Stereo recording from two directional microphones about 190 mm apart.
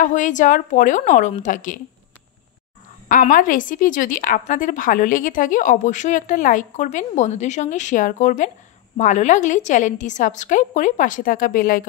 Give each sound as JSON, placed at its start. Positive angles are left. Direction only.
{"t": 0.0, "sound": "a woman's voice", "side_deg": 40}
{"t": 3.1, "sound": "a woman's voice", "side_deg": 45}